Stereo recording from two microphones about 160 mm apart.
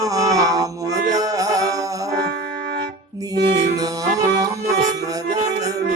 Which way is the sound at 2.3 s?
75° right (ahead or behind).